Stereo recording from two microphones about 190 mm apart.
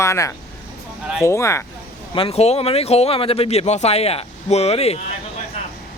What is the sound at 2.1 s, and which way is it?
Speech, 30° left (ahead or behind).